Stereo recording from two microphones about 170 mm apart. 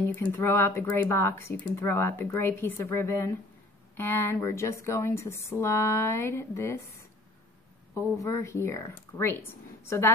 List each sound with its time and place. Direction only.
0.0 s speech: 15° left (ahead or behind)
8.2 s speech: 15° left (ahead or behind)